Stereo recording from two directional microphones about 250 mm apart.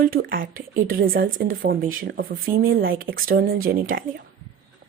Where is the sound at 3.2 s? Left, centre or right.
Right.